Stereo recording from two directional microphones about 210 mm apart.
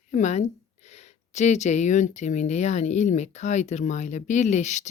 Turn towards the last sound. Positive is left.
turn(degrees=35)  # may be behind; listen again after turning